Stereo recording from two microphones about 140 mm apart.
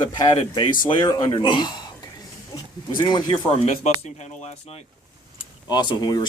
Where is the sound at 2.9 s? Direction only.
30° left (ahead or behind).